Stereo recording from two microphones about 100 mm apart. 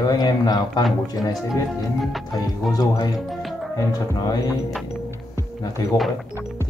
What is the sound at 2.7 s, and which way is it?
Speech, 40° left (ahead or behind).